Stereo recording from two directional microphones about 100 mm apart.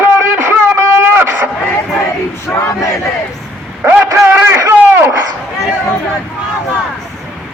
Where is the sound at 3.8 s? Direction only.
15° right (ahead or behind).